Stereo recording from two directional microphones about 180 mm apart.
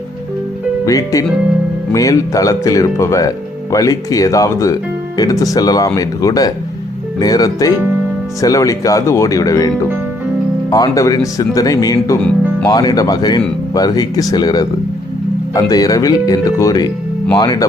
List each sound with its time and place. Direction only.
0.9 s speech: 20° left (ahead or behind)
10.7 s speech: 20° left (ahead or behind)
15.7 s speech: 20° left (ahead or behind)